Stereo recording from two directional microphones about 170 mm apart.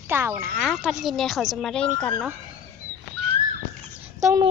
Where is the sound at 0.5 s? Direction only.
5° right (ahead or behind).